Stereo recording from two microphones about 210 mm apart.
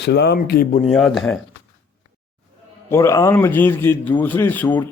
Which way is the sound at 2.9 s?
10° left (ahead or behind).